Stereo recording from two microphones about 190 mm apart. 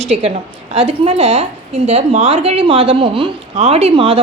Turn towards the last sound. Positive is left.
turn(degrees=-30)  # may be behind; listen again after turning